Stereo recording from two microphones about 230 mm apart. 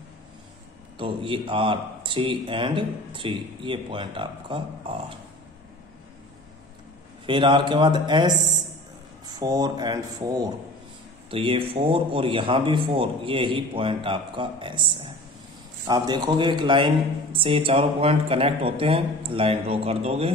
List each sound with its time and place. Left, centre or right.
0.9 s speech: right
7.2 s speech: right